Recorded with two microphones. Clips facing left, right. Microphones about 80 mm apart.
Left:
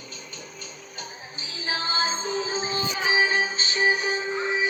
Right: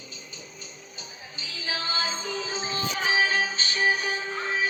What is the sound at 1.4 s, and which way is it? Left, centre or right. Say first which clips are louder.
Music: left 2 dB; left.